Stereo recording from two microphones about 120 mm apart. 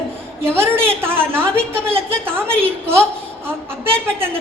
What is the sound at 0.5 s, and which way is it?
A woman's voice, 20° right (ahead or behind).